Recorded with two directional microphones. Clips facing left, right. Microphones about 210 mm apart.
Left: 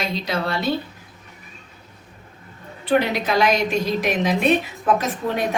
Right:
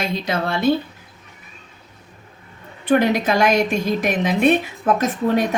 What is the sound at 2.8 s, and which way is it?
Speech, 50° right (ahead or behind).